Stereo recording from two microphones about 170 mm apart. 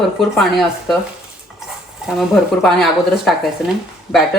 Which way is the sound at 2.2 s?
Centre (ahead or behind).